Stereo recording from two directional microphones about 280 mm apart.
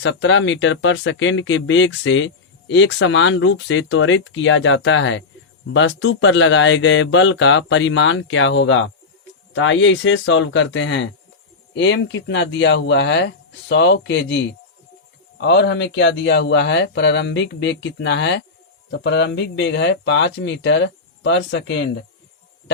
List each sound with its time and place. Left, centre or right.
0.0 s speech: left